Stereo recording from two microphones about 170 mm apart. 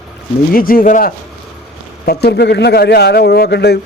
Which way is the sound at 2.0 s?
70° left (ahead or behind).